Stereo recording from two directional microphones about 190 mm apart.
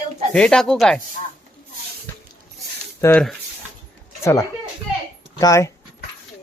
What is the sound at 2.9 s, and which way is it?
Speech, 15° left (ahead or behind).